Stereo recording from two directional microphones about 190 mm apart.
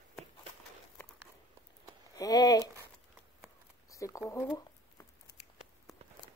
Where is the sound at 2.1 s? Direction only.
20° left (ahead or behind).